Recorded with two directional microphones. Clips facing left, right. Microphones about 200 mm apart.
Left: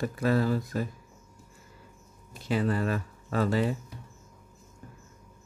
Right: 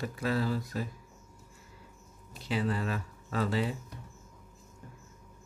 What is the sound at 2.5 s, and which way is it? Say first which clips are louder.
Speech: left 4 dB; 50° left (ahead or behind).